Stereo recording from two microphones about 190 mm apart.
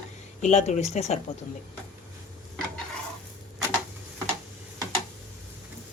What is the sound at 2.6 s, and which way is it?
Stir, 5° left (ahead or behind).